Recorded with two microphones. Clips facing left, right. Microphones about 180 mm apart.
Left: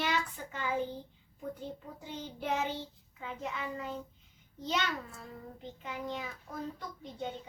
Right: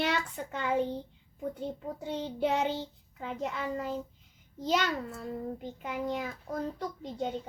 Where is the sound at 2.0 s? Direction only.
70° right (ahead or behind).